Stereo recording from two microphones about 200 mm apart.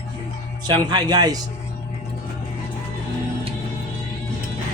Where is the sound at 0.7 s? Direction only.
20° right (ahead or behind).